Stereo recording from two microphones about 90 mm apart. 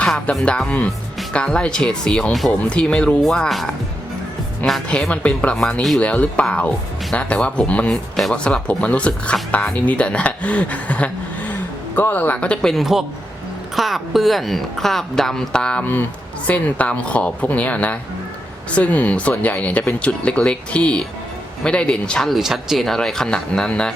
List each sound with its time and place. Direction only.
0.0 s speech: 10° left (ahead or behind)
12.7 s a woman's voice: 5° right (ahead or behind)
22.4 s speech: 5° right (ahead or behind)